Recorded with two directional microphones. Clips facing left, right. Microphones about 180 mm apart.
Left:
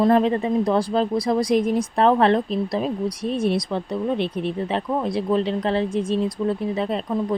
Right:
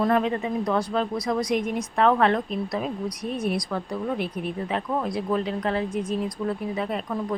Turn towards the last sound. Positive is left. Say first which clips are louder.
# left 4 dB
turn(degrees=25)  # may be behind; listen again after turning